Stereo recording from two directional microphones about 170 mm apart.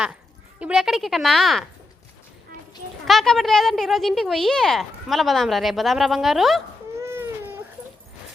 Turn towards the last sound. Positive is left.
turn(degrees=-15)  # may be behind; listen again after turning